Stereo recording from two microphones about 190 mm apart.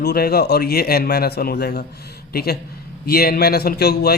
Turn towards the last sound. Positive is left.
turn(degrees=55)  # may be behind; listen again after turning